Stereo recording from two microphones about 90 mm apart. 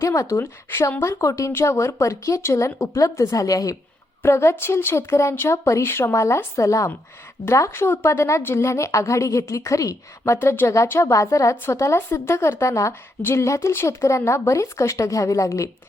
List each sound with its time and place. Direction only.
0.0 s speech: 35° left (ahead or behind)
10.3 s speech: 25° left (ahead or behind)